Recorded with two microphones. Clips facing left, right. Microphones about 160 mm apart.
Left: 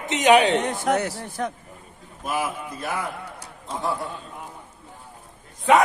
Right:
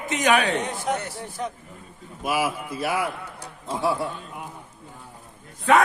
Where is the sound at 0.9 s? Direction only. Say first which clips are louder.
Left 4 dB; 80° left.